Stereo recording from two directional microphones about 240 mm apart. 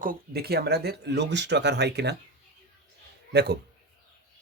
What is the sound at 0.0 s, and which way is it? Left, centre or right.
Speech, right.